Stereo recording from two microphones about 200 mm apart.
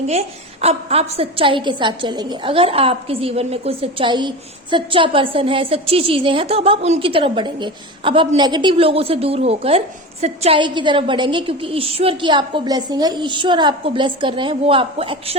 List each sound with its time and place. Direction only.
0.1 s a woman's voice: 30° right (ahead or behind)